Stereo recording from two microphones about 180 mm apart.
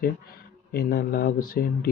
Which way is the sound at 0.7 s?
65° left (ahead or behind).